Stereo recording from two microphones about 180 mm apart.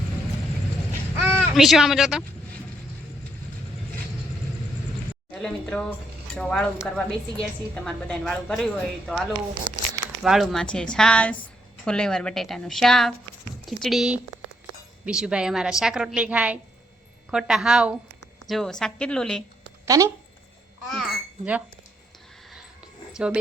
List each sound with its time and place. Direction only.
1.1 s speech: 5° right (ahead or behind)
5.3 s a woman's voice: 5° left (ahead or behind)
19.8 s speech: 20° right (ahead or behind)
20.8 s a child's voice: centre (ahead or behind)
23.1 s speech: 5° right (ahead or behind)